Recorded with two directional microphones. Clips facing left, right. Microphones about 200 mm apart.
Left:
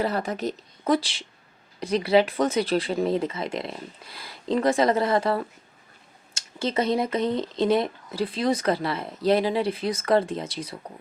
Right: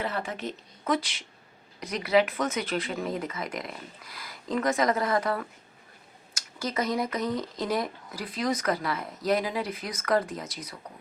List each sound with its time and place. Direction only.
0.0 s speech: 40° left (ahead or behind)